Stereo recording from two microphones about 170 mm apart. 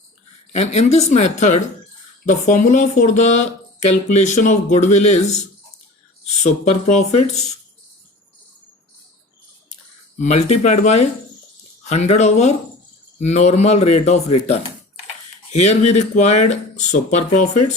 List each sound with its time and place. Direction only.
0.5 s speech: 40° left (ahead or behind)
6.4 s speech: 45° left (ahead or behind)
10.2 s speech: 40° left (ahead or behind)